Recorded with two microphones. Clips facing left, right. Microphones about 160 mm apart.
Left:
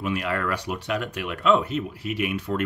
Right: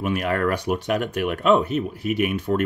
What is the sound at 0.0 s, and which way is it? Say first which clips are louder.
Speech: right 4 dB; 50° right (ahead or behind).